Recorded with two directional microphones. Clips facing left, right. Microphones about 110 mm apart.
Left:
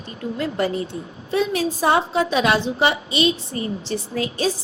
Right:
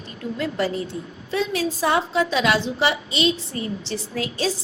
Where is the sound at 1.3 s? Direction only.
40° left (ahead or behind).